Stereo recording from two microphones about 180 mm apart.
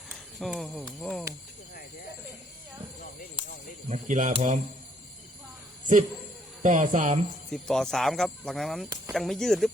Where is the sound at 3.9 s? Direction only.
45° right (ahead or behind).